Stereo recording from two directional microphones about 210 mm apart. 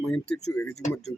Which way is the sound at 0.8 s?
35° left (ahead or behind).